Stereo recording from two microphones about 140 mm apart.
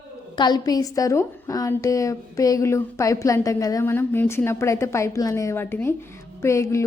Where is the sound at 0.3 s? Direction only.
30° left (ahead or behind).